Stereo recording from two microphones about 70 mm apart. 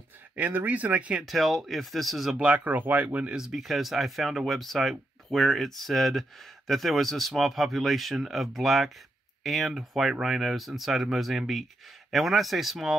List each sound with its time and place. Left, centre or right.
0.4 s speech: right
1.2 s speech: centre
2.3 s speech: centre
3.3 s speech: centre